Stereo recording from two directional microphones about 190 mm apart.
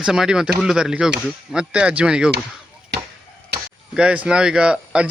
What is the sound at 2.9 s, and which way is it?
Chop, 60° right (ahead or behind).